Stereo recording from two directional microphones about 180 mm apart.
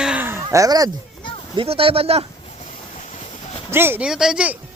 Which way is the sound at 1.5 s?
30° right (ahead or behind).